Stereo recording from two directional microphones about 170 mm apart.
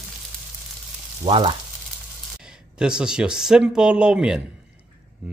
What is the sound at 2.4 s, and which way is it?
Speech, 5° right (ahead or behind).